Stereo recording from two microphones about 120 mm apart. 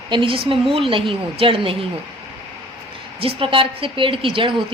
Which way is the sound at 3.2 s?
45° right (ahead or behind).